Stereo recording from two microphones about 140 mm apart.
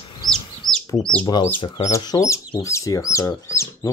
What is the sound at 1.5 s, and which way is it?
Speech, 40° left (ahead or behind).